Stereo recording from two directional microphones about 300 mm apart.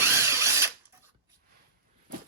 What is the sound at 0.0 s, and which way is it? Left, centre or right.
Drill, centre.